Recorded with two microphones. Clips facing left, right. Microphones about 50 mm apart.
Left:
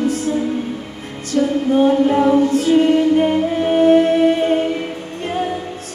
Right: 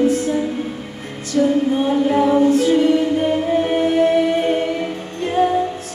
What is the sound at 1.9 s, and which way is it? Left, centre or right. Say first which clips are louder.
Music: left 1 dB; left.